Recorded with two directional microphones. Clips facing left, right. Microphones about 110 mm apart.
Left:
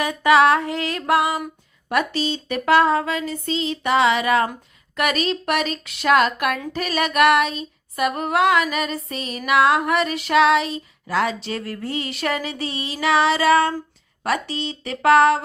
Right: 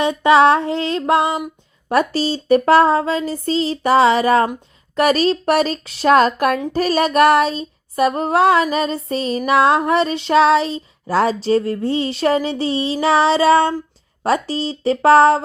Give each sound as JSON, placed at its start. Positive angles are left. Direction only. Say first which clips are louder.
{"t": 0.0, "sound": "child singing", "louder": "right 3 dB", "side_deg": -25}
{"t": 1.9, "sound": "female singing", "louder": "right 5 dB", "side_deg": -35}
{"t": 9.5, "sound": "child singing", "louder": "right 3 dB", "side_deg": -30}
{"t": 14.3, "sound": "female singing", "louder": "right 5 dB", "side_deg": -35}